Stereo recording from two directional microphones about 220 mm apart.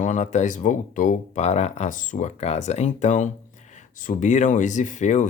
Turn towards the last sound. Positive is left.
turn(degrees=35)  # may be behind; listen again after turning